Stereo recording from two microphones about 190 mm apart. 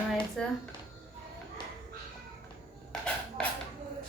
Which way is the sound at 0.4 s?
5° left (ahead or behind).